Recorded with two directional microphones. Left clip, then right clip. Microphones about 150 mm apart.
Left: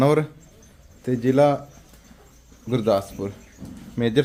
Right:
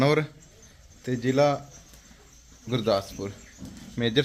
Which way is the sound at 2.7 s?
15° left (ahead or behind).